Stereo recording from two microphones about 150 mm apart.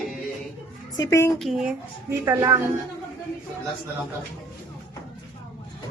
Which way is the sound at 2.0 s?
20° right (ahead or behind).